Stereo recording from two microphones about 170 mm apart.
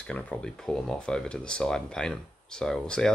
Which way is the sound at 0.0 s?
5° left (ahead or behind).